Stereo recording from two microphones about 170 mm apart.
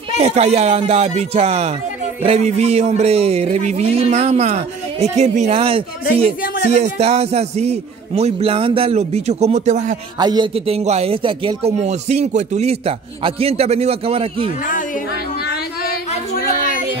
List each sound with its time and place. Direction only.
0.2 s a man's voice: 40° right (ahead or behind)
10.1 s a man's voice: 25° right (ahead or behind)
15.4 s a sound: 65° left (ahead or behind)